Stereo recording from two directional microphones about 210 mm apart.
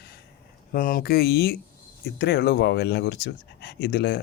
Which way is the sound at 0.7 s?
45° left (ahead or behind).